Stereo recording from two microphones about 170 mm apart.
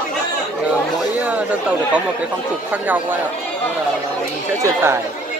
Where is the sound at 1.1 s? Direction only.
10° right (ahead or behind).